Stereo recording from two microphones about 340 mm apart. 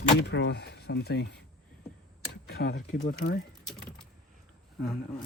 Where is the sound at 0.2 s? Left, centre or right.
Left.